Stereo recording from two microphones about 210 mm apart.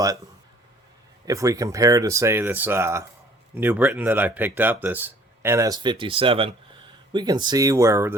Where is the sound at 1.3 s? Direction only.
15° right (ahead or behind).